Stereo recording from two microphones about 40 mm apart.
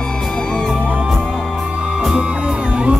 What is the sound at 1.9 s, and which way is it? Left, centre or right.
Music, centre.